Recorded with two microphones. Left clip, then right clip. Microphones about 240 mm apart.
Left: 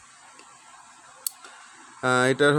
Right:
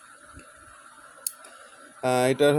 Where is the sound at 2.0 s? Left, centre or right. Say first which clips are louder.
Left 1 dB; centre.